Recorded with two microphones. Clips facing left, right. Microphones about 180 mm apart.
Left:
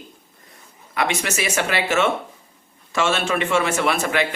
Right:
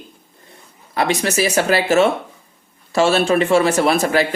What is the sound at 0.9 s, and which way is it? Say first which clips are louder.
Speech: right 5 dB; 35° right (ahead or behind).